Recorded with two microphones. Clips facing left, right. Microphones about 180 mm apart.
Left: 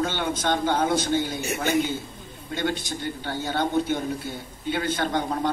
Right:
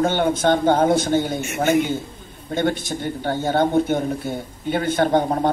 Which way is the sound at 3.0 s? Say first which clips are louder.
Right 7 dB; 50° right (ahead or behind).